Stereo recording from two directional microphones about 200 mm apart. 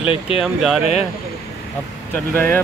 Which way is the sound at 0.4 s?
Centre (ahead or behind).